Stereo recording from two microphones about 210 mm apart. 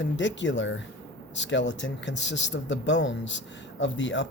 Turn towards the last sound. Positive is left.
turn(degrees=60)  # may be behind; listen again after turning